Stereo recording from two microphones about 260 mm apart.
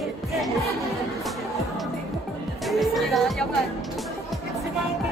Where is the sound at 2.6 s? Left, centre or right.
Centre.